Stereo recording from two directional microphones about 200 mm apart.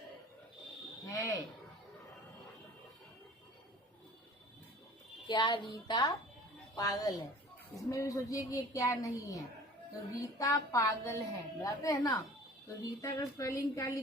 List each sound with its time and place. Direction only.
1.0 s speech: 15° left (ahead or behind)
5.3 s speech: 20° left (ahead or behind)